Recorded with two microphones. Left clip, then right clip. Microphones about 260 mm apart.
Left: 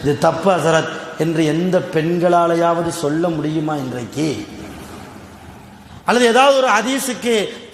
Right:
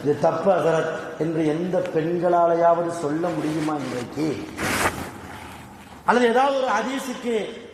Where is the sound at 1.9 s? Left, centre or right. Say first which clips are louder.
Left 5 dB; left.